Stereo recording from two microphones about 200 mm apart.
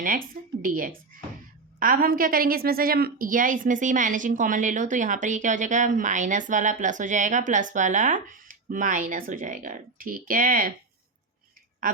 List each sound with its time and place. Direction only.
0.6 s a woman's voice: 45° right (ahead or behind)